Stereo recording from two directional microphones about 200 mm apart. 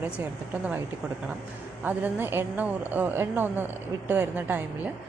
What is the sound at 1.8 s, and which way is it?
A woman's voice, 10° right (ahead or behind).